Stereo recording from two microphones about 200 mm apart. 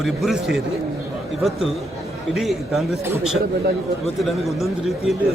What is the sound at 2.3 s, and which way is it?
A man's voice, centre (ahead or behind).